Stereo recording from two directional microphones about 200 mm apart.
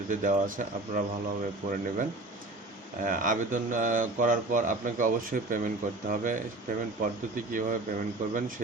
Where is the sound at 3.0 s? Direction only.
45° right (ahead or behind).